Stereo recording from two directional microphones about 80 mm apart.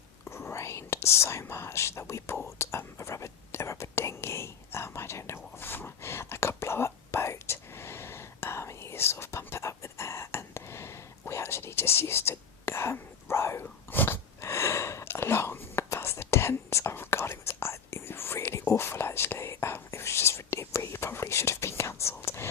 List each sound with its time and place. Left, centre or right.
0.3 s speech: left
2.6 s whispering: left